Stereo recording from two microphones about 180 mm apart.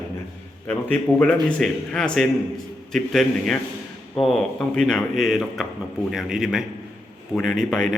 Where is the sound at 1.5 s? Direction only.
5° left (ahead or behind).